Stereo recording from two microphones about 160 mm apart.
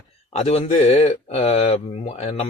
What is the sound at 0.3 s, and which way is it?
Speech, 40° left (ahead or behind).